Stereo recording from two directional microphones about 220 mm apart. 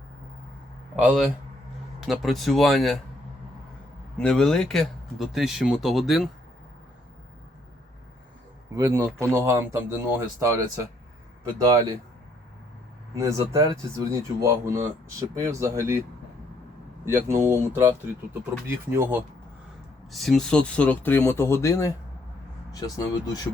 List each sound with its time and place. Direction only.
0.9 s speech: 5° right (ahead or behind)
4.2 s speech: 5° left (ahead or behind)
8.7 s speech: 15° right (ahead or behind)
13.1 s speech: 15° right (ahead or behind)
17.2 s speech: 10° right (ahead or behind)
20.1 s speech: centre (ahead or behind); by 23.5 s 15° left (ahead or behind)